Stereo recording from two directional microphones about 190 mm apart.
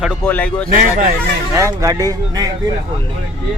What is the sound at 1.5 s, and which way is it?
Speech, 15° right (ahead or behind).